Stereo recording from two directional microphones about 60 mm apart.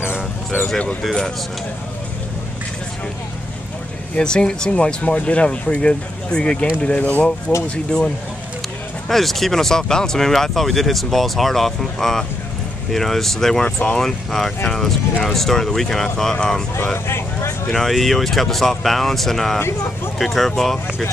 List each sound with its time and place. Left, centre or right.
4.1 s speech: centre
9.1 s speech: centre
17.1 s vehicle: left
17.7 s speech: centre